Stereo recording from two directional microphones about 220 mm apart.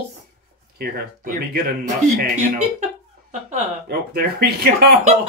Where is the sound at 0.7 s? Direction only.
40° right (ahead or behind).